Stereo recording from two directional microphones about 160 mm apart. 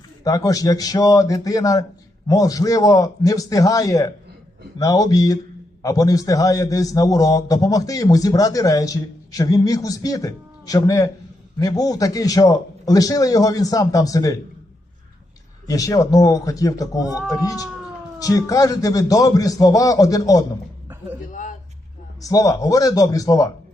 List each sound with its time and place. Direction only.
0.3 s a man's voice: 20° left (ahead or behind)
15.6 s a man's voice: 20° left (ahead or behind)
22.2 s a man's voice: 20° left (ahead or behind)